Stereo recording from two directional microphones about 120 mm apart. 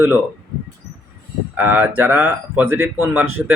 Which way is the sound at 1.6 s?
15° right (ahead or behind).